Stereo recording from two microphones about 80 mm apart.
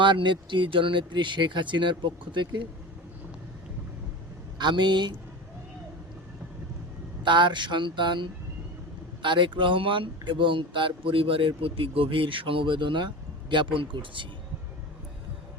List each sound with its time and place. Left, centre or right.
0.0 s speech: right
4.5 s speech: right
7.2 s speech: right
9.2 s speech: right